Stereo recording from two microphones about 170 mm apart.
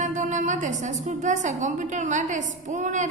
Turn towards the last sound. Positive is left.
turn(degrees=-45)  # may be behind; listen again after turning